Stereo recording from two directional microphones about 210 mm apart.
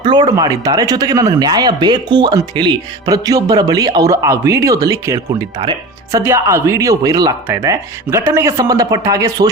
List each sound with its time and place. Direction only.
0.0 s speech: 20° right (ahead or behind)